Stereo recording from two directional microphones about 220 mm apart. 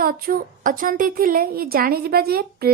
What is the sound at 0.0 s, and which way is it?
A woman's voice, 40° right (ahead or behind).